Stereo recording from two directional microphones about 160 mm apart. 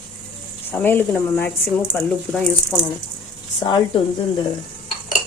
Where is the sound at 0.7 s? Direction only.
10° left (ahead or behind).